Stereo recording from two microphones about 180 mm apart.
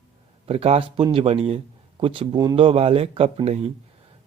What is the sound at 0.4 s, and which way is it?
A man's voice, 35° right (ahead or behind).